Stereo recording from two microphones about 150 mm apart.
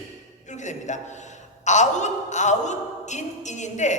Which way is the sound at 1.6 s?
50° left (ahead or behind).